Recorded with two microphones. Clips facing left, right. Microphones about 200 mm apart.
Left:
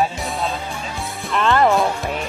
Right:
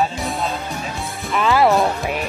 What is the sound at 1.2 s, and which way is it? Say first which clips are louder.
Speech: right 1 dB; 5° right (ahead or behind).